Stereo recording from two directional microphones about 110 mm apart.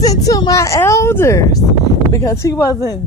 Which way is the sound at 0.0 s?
35° left (ahead or behind).